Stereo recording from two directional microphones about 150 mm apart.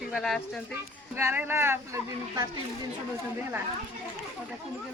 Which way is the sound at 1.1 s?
15° right (ahead or behind).